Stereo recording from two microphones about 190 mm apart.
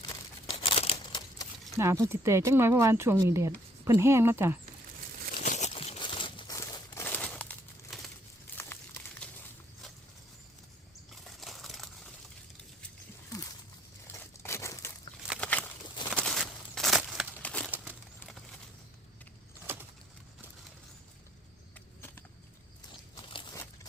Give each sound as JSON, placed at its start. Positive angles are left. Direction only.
{"t": 0.4, "sound": "crumpling", "side_deg": 30}
{"t": 1.8, "sound": "speech", "side_deg": -15}
{"t": 5.4, "sound": "crumpling", "side_deg": 40}
{"t": 11.1, "sound": "crumpling", "side_deg": 0}
{"t": 14.1, "sound": "crumpling", "side_deg": 15}
{"t": 15.4, "sound": "a sound", "side_deg": 5}
{"t": 17.3, "sound": "crumpling", "side_deg": 5}
{"t": 17.7, "sound": "a sound", "side_deg": -5}
{"t": 22.9, "sound": "biting", "side_deg": 25}